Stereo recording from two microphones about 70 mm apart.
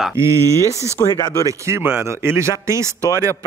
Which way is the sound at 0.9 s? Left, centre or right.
Left.